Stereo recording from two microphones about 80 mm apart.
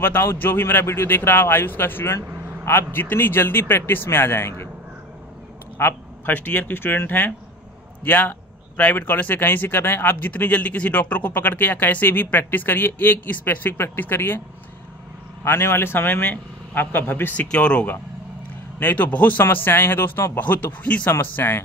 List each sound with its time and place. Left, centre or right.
0.0 s speech: left
2.2 s vehicle: right
2.9 s speech: left
5.8 s speech: left
15.4 s speech: left